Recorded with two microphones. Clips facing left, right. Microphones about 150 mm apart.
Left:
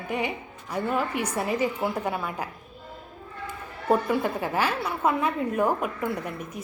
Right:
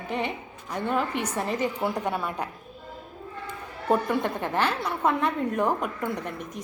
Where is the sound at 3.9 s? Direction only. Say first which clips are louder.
Left 1 dB; 5° left (ahead or behind).